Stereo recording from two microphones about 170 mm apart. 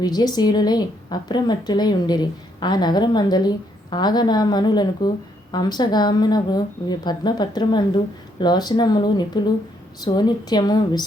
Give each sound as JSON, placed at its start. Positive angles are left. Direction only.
{"t": 0.0, "sound": "a woman's voice", "side_deg": 25}